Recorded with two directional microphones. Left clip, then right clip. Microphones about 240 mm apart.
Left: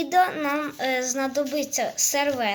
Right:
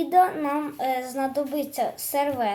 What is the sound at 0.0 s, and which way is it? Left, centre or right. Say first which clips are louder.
Speech: right 1 dB; centre.